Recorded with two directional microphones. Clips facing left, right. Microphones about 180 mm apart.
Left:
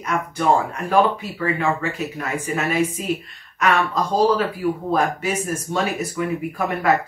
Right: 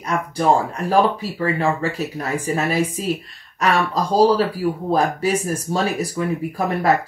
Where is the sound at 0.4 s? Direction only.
35° right (ahead or behind).